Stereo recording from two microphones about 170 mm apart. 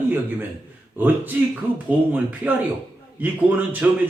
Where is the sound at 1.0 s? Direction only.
10° right (ahead or behind).